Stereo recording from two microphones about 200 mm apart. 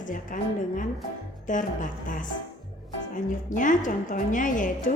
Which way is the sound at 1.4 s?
40° left (ahead or behind).